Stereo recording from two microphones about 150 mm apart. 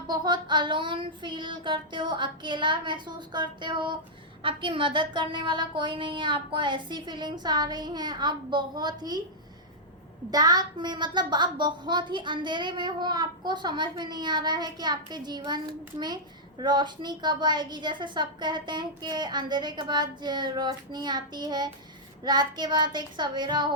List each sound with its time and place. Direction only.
0.1 s a woman's voice: 30° right (ahead or behind)
10.3 s a woman's voice: 25° right (ahead or behind)